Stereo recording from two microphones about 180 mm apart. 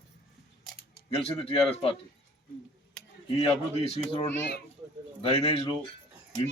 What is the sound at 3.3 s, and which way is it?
Speech, 30° left (ahead or behind).